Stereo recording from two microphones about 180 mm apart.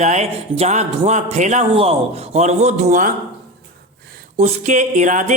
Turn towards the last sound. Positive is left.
turn(degrees=-45)  # may be behind; listen again after turning